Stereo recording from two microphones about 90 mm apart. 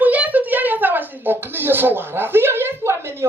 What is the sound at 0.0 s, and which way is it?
Speech, 20° right (ahead or behind).